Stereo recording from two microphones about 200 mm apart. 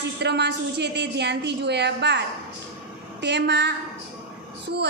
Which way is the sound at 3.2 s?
60° right (ahead or behind).